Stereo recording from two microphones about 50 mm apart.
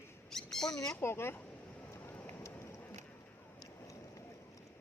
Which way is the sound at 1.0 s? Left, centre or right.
Left.